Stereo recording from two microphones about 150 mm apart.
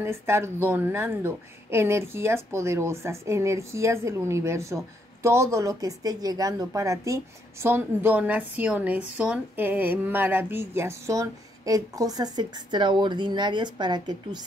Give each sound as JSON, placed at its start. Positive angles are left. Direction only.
{"t": 0.0, "sound": "speech", "side_deg": -15}